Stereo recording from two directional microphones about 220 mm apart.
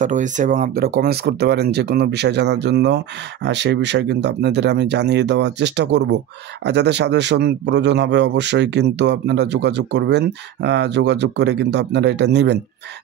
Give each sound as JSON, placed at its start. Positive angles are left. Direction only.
{"t": 0.0, "sound": "a man's voice", "side_deg": -35}